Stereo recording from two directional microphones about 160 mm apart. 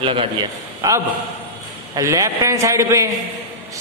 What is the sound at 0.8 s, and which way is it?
A man's voice, 20° right (ahead or behind).